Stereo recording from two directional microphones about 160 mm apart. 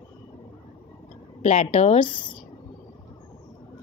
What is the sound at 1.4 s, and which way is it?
Speech, 45° left (ahead or behind).